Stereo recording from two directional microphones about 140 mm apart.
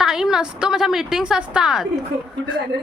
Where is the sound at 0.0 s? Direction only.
5° right (ahead or behind).